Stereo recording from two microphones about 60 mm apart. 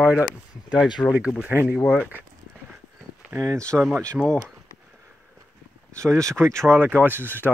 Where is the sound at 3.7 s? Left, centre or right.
Centre.